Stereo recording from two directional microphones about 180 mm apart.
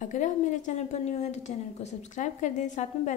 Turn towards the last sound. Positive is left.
turn(degrees=40)  # may be behind; listen again after turning